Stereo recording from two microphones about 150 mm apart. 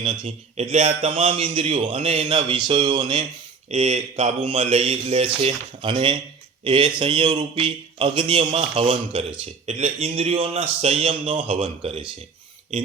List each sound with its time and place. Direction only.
0.0 s a man's voice: 35° right (ahead or behind)
1.1 s a man's voice: 40° right (ahead or behind)
3.7 s a man's voice: 45° right (ahead or behind)